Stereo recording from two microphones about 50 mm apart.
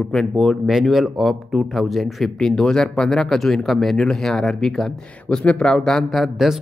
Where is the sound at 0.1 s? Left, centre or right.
Centre.